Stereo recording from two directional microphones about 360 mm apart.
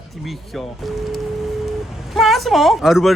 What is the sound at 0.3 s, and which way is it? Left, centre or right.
Speech, centre.